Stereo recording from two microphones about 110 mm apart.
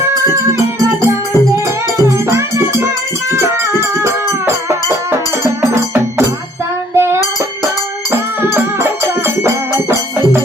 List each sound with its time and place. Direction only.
0.3 s music: 30° right (ahead or behind)
5.7 s music: 25° right (ahead or behind)